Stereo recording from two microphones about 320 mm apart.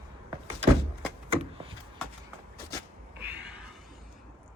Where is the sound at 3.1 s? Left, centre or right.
Right.